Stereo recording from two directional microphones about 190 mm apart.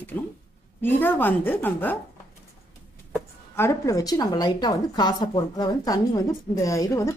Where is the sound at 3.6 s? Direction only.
15° left (ahead or behind).